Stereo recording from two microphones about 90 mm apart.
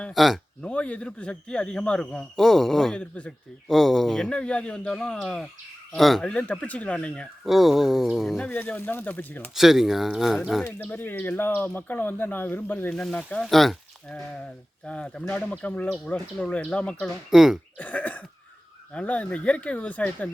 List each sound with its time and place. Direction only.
0.1 s speech: centre (ahead or behind)
0.6 s speech: 15° left (ahead or behind)
3.0 s speech: 10° left (ahead or behind)
3.7 s speech: centre (ahead or behind)
6.2 s speech: 10° left (ahead or behind)
7.4 s speech: 5° right (ahead or behind)
8.4 s speech: 15° left (ahead or behind)
9.6 s speech: 5° right (ahead or behind)
10.8 s speech: 20° left (ahead or behind)
12.9 s speech: 10° left (ahead or behind)
14.8 s speech: 10° left (ahead or behind)
17.1 s speech: 5° right (ahead or behind)
17.7 s speech: 15° left (ahead or behind)